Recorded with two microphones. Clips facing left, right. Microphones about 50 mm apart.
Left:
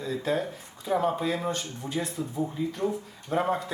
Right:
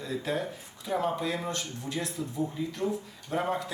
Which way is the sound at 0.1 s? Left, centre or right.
Left.